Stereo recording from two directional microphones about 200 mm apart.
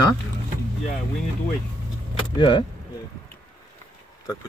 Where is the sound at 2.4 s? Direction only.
25° left (ahead or behind).